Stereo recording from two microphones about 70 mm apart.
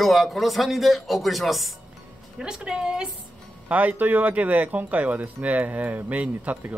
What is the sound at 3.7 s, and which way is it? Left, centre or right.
Speech, right.